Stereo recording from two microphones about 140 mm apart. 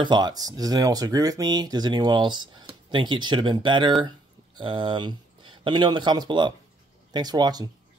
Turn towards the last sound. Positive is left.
turn(degrees=-30)  # may be behind; listen again after turning